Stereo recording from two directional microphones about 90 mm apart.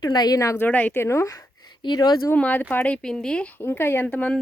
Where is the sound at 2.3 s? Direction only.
20° left (ahead or behind).